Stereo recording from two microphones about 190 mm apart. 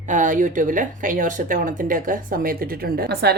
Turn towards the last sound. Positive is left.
turn(degrees=-55)  # may be behind; listen again after turning